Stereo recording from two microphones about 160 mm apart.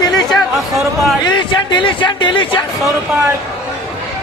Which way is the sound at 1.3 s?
30° left (ahead or behind).